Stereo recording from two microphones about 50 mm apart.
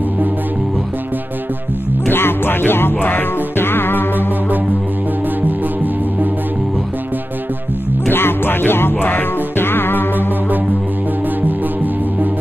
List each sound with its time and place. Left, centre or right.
2.0 s music: left
8.1 s music: left
11.4 s music: right